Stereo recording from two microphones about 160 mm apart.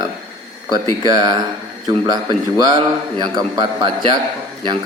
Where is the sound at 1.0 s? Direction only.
25° right (ahead or behind).